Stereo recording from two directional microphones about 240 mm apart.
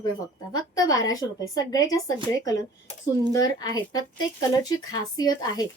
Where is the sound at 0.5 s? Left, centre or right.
Centre.